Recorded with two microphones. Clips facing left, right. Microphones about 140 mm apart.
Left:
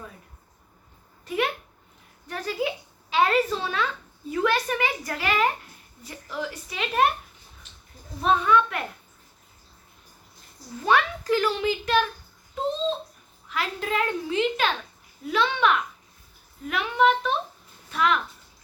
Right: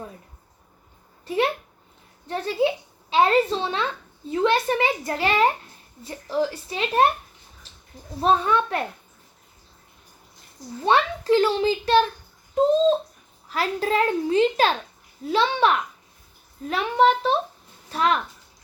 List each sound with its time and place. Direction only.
1.2 s a sound: 30° right (ahead or behind)
2.2 s a woman's voice: 25° right (ahead or behind)
8.2 s a child's voice: 30° right (ahead or behind)
10.8 s a child's voice: 30° right (ahead or behind)
13.5 s a child's voice: 35° right (ahead or behind)